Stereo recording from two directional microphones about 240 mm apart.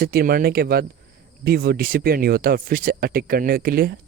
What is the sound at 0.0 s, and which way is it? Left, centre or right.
Speech, right.